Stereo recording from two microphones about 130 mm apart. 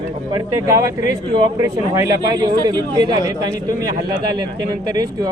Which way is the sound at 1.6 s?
25° right (ahead or behind).